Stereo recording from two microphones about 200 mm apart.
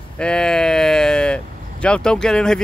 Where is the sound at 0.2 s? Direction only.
5° left (ahead or behind).